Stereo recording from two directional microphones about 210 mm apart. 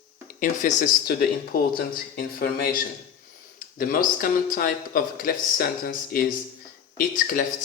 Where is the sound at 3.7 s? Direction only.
40° left (ahead or behind).